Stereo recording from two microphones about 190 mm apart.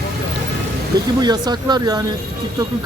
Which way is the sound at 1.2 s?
20° right (ahead or behind).